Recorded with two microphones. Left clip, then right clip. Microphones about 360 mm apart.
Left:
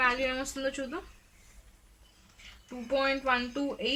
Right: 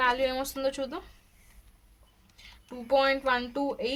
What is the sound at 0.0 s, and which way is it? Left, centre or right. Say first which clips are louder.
Speech: right 2 dB; centre.